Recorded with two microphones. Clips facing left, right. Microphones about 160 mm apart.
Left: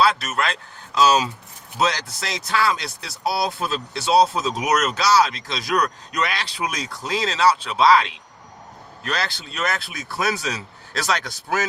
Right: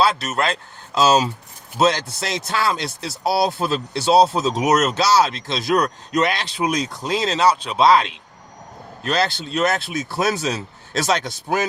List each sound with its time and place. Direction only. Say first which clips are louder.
0.0 s speech: right 1 dB; 25° right (ahead or behind)